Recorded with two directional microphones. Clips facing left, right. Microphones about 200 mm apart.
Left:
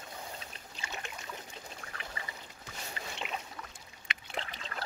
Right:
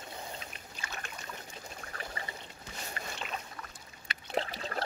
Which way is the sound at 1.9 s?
40° right (ahead or behind).